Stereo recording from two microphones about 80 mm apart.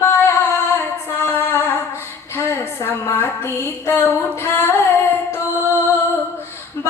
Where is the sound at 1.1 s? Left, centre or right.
Left.